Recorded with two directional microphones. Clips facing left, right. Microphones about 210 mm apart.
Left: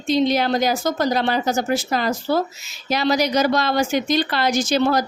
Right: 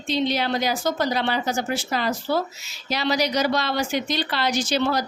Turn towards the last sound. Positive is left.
turn(degrees=45)  # may be behind; listen again after turning